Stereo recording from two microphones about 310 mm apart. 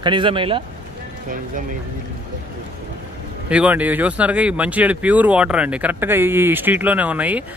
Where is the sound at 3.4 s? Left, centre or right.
Centre.